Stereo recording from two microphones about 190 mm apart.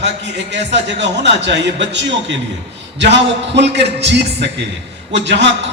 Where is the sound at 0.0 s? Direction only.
65° right (ahead or behind).